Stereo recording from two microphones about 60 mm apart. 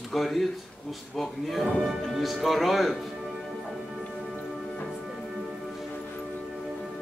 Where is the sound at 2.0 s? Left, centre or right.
Centre.